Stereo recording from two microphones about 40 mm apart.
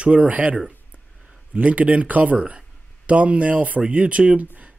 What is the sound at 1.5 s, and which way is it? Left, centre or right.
Speech, right.